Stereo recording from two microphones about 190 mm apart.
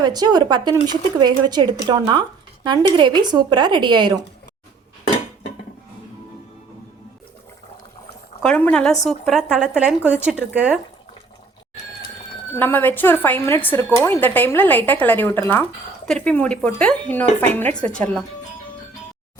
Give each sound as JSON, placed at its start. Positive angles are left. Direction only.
{"t": 0.0, "sound": "speech", "side_deg": -20}
{"t": 8.4, "sound": "speech", "side_deg": 5}
{"t": 12.5, "sound": "speech", "side_deg": 10}